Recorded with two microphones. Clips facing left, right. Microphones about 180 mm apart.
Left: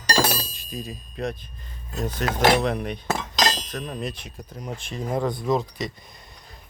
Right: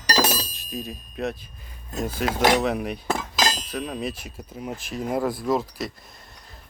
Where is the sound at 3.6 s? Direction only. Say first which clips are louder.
Right 2 dB; 5° right (ahead or behind).